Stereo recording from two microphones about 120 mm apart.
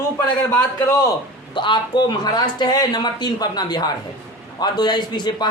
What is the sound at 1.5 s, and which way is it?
Speech, 40° left (ahead or behind).